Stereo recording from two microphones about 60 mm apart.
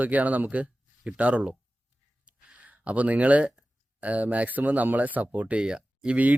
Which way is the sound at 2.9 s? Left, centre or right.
Right.